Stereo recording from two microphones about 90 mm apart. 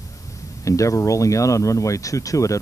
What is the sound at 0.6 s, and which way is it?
Speech, 35° left (ahead or behind).